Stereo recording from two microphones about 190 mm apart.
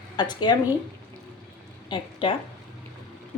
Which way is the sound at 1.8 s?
25° left (ahead or behind).